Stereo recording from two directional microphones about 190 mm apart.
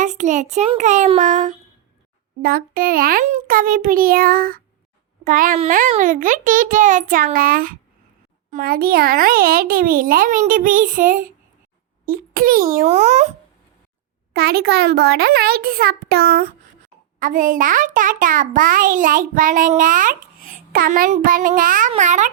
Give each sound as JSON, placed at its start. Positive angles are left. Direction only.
{"t": 0.0, "sound": "a child's voice", "side_deg": -40}
{"t": 12.8, "sound": "a child's voice", "side_deg": -35}
{"t": 14.3, "sound": "a child's voice", "side_deg": -55}